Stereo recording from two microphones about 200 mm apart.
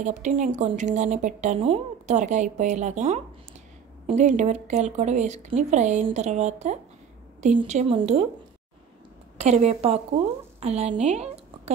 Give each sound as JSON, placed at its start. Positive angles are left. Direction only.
{"t": 0.0, "sound": "speech", "side_deg": -40}
{"t": 9.4, "sound": "a woman's voice", "side_deg": -35}